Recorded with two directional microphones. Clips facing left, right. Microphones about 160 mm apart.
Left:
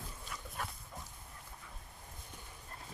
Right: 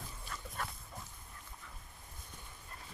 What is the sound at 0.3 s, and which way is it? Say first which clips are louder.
Dog: right 1 dB; 10° left (ahead or behind).